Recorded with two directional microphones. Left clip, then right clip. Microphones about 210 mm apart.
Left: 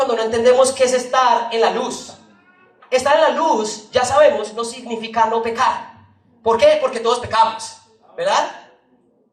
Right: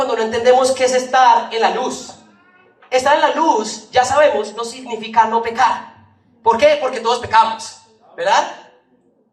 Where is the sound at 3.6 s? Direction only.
30° right (ahead or behind).